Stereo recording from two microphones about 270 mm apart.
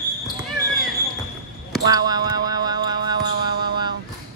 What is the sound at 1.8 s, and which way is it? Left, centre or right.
Speech, centre.